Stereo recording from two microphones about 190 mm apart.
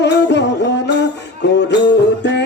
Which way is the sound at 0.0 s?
65° left (ahead or behind).